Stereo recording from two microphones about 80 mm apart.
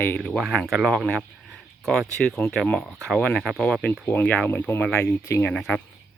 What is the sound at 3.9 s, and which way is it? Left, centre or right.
Speech, left.